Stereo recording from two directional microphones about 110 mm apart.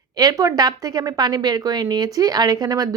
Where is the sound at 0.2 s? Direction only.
35° right (ahead or behind).